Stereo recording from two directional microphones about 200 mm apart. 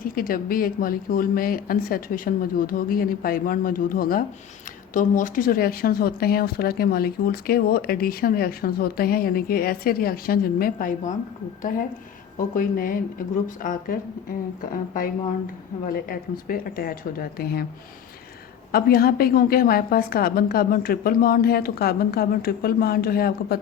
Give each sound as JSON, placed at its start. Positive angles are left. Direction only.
{"t": 0.2, "sound": "speech", "side_deg": 45}
{"t": 12.5, "sound": "speech", "side_deg": 45}
{"t": 15.9, "sound": "speech", "side_deg": 45}
{"t": 18.7, "sound": "speech", "side_deg": 50}